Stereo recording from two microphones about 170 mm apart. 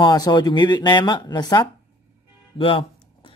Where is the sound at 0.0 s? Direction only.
25° left (ahead or behind).